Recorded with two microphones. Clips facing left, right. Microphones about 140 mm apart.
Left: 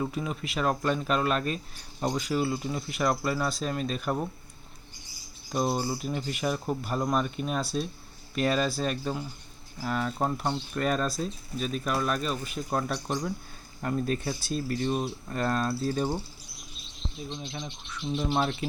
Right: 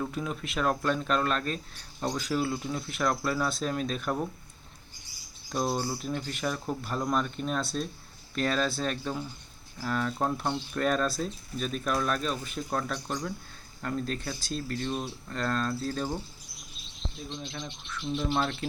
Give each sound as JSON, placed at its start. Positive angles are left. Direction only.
{"t": 0.0, "sound": "speech", "side_deg": 5}
{"t": 5.5, "sound": "speech", "side_deg": 10}
{"t": 13.1, "sound": "speech", "side_deg": 30}
{"t": 13.8, "sound": "speech", "side_deg": 15}
{"t": 16.6, "sound": "speech", "side_deg": 0}